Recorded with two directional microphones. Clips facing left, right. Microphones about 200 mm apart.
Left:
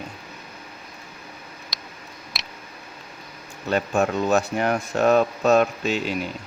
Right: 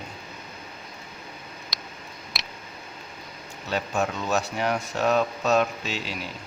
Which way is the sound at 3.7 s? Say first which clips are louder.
Left 5 dB; 55° left (ahead or behind).